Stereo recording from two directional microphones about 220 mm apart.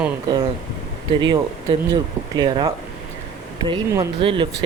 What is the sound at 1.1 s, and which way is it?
Speech, 20° right (ahead or behind).